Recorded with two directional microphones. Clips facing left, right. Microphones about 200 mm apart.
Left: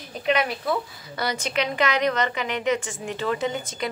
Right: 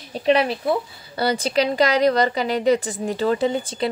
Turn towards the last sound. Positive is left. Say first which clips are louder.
# right 6 dB
turn(degrees=-30)  # may be behind; listen again after turning